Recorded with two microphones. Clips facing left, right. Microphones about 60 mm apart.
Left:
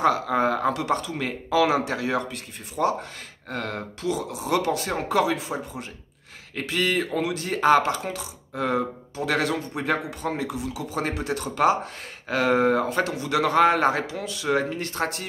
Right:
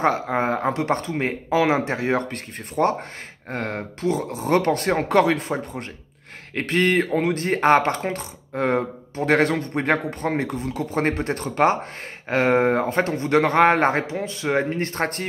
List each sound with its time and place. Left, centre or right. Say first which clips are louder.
0.0 s a man's voice: even; right
2.2 s speech: right 4 dB; right
3.4 s a man's voice: right 3 dB; right